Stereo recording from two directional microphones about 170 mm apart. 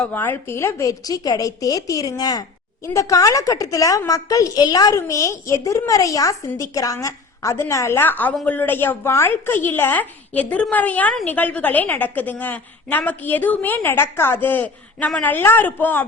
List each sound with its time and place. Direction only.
0.0 s a woman's voice: 10° left (ahead or behind)